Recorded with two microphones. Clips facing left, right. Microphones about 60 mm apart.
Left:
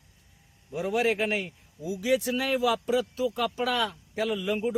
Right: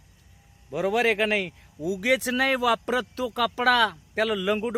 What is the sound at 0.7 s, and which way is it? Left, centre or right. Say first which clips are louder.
Speech: right 3 dB; right.